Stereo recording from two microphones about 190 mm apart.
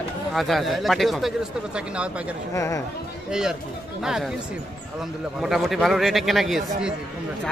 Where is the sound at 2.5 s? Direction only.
15° left (ahead or behind).